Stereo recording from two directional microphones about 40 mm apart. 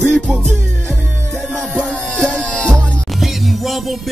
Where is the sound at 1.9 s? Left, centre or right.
Centre.